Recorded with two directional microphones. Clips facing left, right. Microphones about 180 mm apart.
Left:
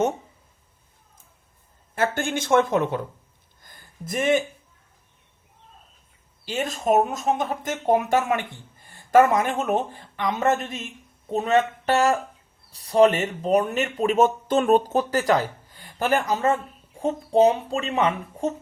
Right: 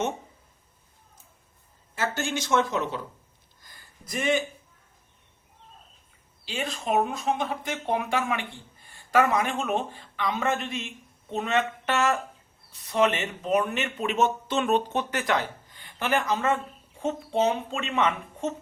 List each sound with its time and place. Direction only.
2.0 s speech: 55° left (ahead or behind)
3.6 s a sound: 50° left (ahead or behind)
6.4 s speech: 45° left (ahead or behind)